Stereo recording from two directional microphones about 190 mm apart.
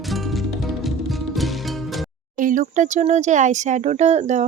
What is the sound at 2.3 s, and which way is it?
Speech, 45° right (ahead or behind).